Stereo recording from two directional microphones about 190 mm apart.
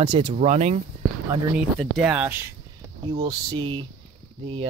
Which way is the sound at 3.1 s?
25° right (ahead or behind).